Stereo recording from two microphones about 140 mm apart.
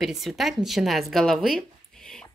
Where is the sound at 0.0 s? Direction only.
Centre (ahead or behind).